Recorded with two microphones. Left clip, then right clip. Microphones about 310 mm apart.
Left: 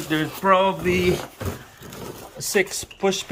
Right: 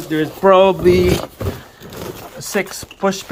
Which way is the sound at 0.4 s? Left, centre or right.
Right.